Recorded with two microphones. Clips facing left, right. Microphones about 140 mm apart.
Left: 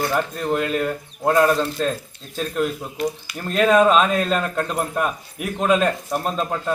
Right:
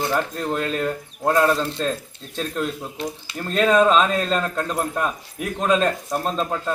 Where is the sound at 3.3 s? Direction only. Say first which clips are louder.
Left 1 dB; 5° left (ahead or behind).